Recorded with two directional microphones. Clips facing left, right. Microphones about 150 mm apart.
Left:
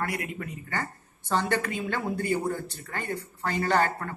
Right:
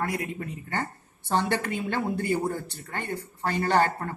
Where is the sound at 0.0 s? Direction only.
25° right (ahead or behind).